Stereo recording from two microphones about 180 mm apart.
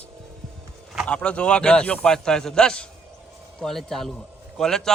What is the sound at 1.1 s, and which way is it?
A man's voice, 5° left (ahead or behind).